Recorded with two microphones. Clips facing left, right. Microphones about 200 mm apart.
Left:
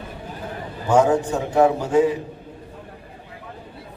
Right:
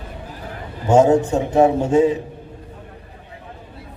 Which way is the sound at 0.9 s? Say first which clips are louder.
Right 4 dB; 25° right (ahead or behind).